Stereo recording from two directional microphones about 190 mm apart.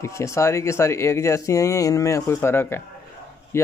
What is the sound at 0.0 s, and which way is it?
Speech, 15° left (ahead or behind).